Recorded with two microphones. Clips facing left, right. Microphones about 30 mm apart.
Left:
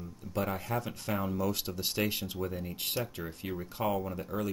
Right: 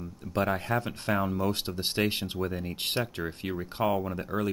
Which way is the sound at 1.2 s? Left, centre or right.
Right.